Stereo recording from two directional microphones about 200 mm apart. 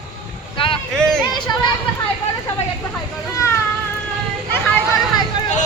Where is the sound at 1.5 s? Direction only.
20° left (ahead or behind).